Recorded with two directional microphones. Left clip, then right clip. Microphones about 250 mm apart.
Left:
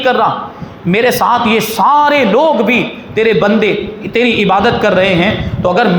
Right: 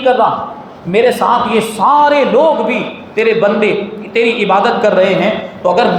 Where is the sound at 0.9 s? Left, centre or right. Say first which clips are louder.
Even; left.